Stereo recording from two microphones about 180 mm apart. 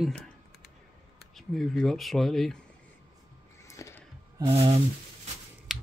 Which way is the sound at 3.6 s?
15° left (ahead or behind).